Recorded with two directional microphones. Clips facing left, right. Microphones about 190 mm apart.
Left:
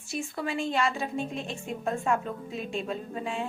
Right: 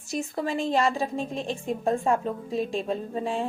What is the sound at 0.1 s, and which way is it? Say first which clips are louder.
A woman's voice: right 4 dB; 40° right (ahead or behind).